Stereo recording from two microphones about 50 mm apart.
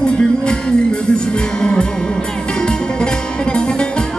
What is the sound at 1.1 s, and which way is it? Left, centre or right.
Music, centre.